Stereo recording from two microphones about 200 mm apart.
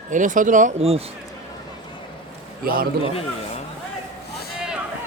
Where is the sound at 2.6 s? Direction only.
45° right (ahead or behind).